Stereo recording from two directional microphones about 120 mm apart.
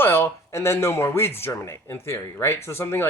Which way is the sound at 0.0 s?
20° left (ahead or behind).